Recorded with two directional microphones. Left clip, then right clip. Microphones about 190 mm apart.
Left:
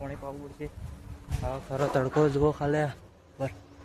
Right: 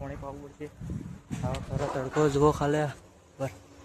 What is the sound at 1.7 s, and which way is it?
Speech, 55° left (ahead or behind).